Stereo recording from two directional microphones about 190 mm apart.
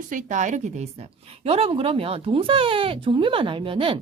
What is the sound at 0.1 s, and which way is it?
A woman's voice, 40° right (ahead or behind).